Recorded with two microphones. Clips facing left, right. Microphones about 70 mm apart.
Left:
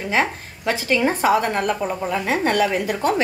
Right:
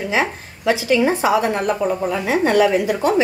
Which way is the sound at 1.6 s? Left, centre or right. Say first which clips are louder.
Right 3 dB; right.